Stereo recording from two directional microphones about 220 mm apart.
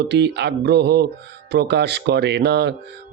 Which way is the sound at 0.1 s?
50° right (ahead or behind).